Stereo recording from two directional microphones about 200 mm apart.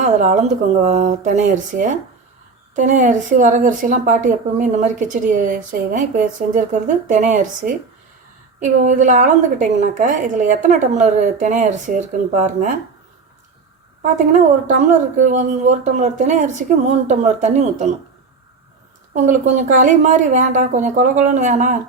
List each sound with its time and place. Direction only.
0.0 s a woman's voice: 35° right (ahead or behind)
14.0 s a woman's voice: 40° right (ahead or behind)
19.1 s a woman's voice: 40° right (ahead or behind)